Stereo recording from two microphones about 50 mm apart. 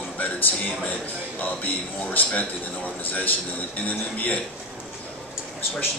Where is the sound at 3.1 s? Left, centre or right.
Left.